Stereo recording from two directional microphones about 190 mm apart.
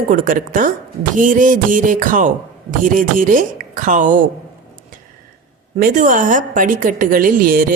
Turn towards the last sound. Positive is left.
turn(degrees=-45)  # may be behind; listen again after turning